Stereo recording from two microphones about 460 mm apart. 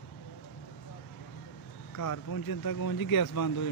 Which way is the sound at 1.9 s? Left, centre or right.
Left.